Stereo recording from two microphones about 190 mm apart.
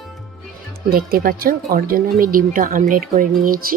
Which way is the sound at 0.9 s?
50° right (ahead or behind).